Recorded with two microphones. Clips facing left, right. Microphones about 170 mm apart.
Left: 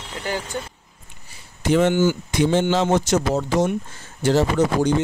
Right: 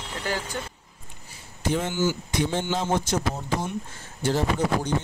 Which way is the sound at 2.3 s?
90° left.